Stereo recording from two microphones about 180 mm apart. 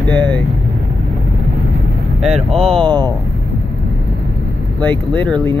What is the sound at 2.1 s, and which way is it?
Speech, centre (ahead or behind).